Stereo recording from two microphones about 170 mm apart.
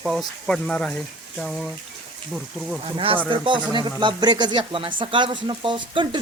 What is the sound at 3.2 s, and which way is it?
Speech, 30° right (ahead or behind).